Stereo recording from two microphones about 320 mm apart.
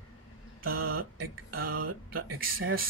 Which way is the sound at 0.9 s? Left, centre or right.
Right.